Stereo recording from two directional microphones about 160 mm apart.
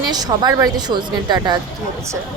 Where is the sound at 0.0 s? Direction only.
25° right (ahead or behind).